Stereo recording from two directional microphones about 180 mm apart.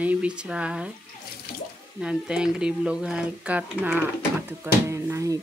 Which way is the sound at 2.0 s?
5° right (ahead or behind).